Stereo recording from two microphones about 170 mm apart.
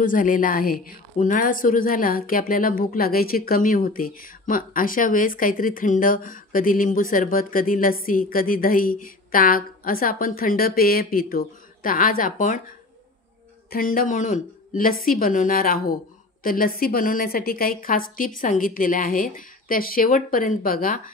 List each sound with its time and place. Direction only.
0.0 s a woman's voice: 50° left (ahead or behind)